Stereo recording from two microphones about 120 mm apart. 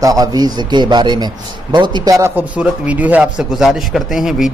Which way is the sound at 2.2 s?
20° right (ahead or behind).